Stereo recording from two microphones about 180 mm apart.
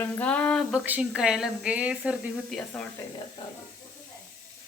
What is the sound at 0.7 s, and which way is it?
Speech, 5° right (ahead or behind).